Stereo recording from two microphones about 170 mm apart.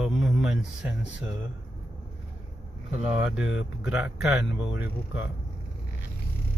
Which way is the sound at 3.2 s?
5° right (ahead or behind).